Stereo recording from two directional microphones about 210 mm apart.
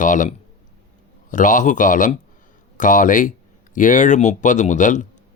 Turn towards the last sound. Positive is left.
turn(degrees=35)  # may be behind; listen again after turning